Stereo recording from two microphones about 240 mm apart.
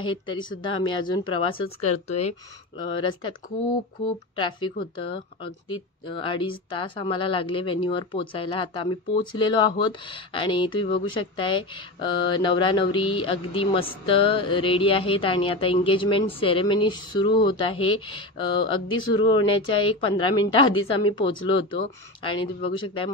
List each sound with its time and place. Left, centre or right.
0.0 s speech: centre
1.6 s speech: left
2.0 s speech: left
4.4 s speech: centre